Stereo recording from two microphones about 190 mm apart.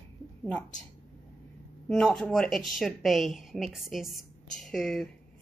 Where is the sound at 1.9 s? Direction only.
5° left (ahead or behind).